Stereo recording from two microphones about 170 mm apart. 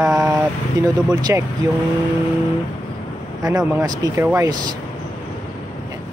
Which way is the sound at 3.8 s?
20° right (ahead or behind).